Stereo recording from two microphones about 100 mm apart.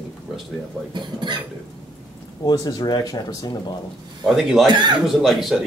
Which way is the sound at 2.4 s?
40° left (ahead or behind).